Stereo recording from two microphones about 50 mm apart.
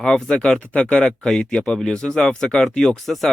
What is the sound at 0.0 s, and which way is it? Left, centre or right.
Speech, centre.